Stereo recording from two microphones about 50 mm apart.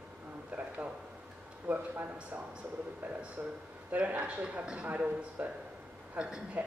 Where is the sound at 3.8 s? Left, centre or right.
Right.